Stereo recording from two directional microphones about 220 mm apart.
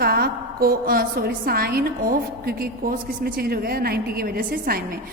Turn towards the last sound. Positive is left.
turn(degrees=-40)  # may be behind; listen again after turning